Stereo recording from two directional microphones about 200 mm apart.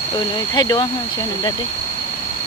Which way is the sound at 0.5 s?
20° left (ahead or behind).